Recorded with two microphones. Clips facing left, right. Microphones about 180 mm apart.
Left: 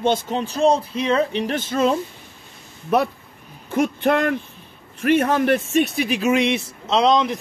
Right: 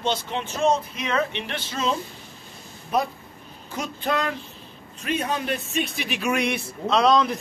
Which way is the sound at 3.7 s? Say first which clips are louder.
Left 8 dB; 55° left (ahead or behind).